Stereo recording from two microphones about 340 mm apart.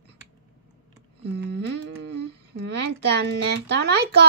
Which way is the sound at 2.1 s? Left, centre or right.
Right.